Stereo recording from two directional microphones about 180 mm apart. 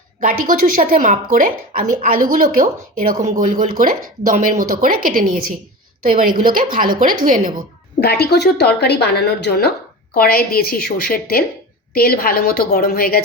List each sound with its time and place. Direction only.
0.2 s speech: 50° right (ahead or behind)
8.0 s speech: 65° left (ahead or behind)